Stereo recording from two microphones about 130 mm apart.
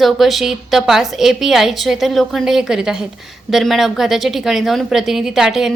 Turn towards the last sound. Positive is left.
turn(degrees=-5)  # may be behind; listen again after turning